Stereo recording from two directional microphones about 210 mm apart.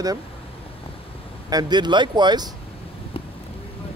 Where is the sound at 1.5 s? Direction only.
20° right (ahead or behind).